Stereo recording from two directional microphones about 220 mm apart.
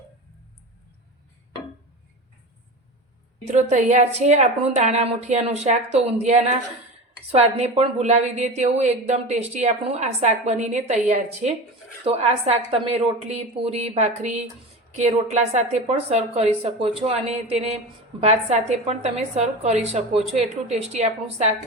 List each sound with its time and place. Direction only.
3.4 s a woman's voice: 35° right (ahead or behind)